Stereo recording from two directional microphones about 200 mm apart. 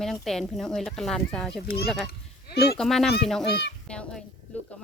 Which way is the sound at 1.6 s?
50° left (ahead or behind).